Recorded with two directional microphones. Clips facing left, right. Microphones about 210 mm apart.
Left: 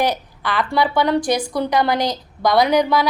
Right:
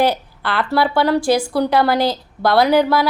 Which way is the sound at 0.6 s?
5° right (ahead or behind).